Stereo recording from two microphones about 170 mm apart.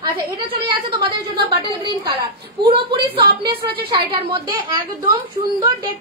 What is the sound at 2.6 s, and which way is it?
Speech, 25° right (ahead or behind).